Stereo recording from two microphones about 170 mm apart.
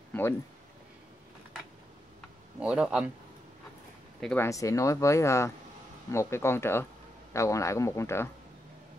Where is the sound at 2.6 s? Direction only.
5° right (ahead or behind).